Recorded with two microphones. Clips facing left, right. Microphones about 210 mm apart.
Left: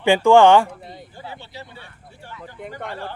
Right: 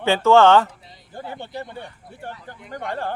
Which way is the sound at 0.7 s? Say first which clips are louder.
Left 10 dB; 55° left (ahead or behind).